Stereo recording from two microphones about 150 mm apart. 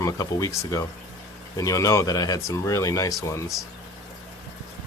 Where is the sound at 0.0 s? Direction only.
20° left (ahead or behind).